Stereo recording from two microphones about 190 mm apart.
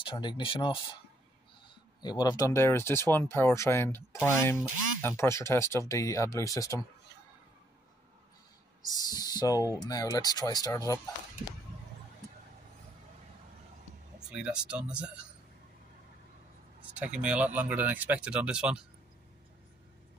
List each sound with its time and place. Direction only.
0.0 s speech: 25° left (ahead or behind)
2.0 s speech: 20° left (ahead or behind)
8.8 s speech: 20° left (ahead or behind)
14.3 s speech: 5° right (ahead or behind)
17.0 s speech: 5° right (ahead or behind)